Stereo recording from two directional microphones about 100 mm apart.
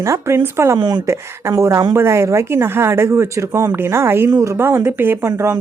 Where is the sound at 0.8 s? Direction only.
50° right (ahead or behind).